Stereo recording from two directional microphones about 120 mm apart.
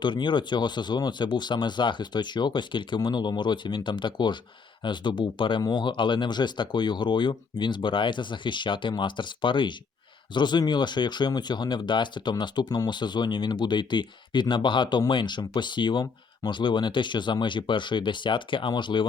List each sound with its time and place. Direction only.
0.0 s speech: 40° left (ahead or behind)